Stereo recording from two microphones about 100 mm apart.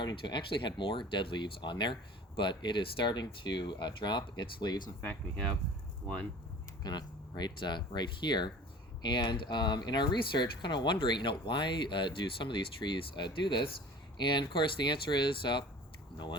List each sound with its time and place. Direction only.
0.0 s speech: 50° left (ahead or behind)
6.8 s speech: 45° left (ahead or behind)